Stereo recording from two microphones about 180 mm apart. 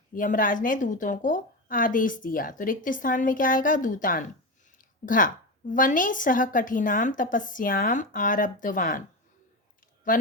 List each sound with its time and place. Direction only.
0.1 s a woman's voice: 50° left (ahead or behind)
10.1 s speech: 50° left (ahead or behind)